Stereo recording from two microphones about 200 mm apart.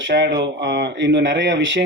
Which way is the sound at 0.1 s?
60° right (ahead or behind).